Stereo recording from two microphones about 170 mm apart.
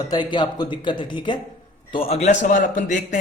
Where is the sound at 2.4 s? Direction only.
50° left (ahead or behind).